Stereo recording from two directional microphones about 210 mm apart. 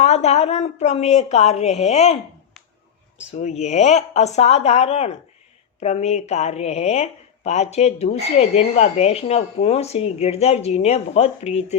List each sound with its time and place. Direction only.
0.0 s speech: 30° left (ahead or behind)
3.3 s speech: 35° left (ahead or behind)